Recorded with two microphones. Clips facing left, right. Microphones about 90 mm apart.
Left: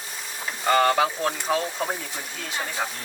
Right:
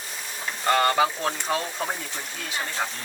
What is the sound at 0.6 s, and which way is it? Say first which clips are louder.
Speech: left 1 dB; centre (ahead or behind).